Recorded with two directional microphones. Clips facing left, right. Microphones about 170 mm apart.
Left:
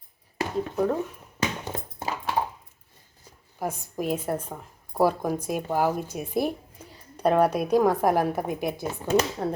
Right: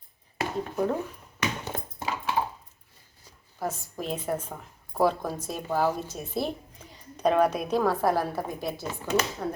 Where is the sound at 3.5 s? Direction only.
15° left (ahead or behind).